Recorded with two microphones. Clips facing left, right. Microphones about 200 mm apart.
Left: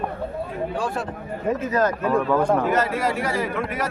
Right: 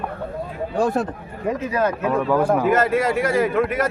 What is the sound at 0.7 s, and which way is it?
Speech, 40° right (ahead or behind).